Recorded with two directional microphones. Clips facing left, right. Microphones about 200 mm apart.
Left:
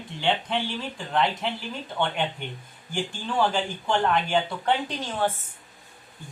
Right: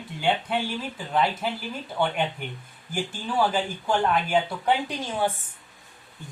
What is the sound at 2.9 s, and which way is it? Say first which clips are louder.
A woman's voice: even; 5° right (ahead or behind).